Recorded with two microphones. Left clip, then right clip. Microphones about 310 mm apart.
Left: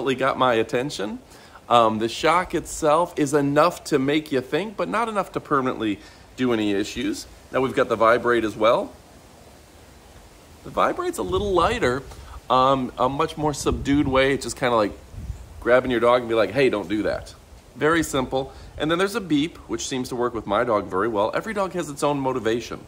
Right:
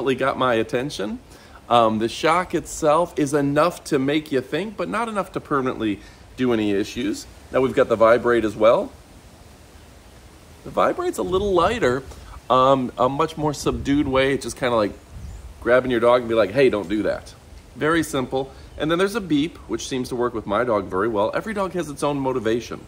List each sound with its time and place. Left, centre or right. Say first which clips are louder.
0.0 s speech: even; centre
10.7 s speech: right 2 dB; centre